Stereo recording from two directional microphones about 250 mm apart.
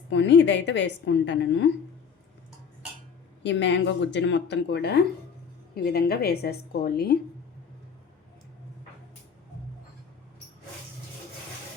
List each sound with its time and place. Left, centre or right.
0.1 s a woman's voice: left
3.4 s a woman's voice: left